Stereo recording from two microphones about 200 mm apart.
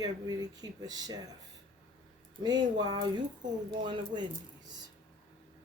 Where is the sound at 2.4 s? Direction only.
20° right (ahead or behind).